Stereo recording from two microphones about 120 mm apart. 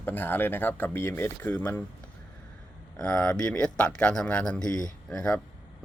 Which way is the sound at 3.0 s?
20° left (ahead or behind).